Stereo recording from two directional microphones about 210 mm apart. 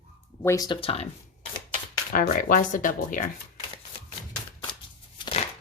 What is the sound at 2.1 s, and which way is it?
Speech, 40° left (ahead or behind).